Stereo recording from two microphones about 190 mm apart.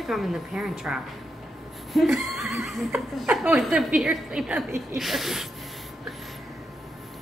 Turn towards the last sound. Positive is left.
turn(degrees=0)  # may be behind; listen again after turning